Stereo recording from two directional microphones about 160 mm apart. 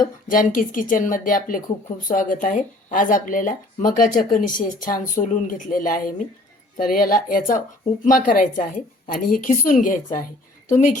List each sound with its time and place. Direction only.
0.3 s a woman's voice: 60° left (ahead or behind)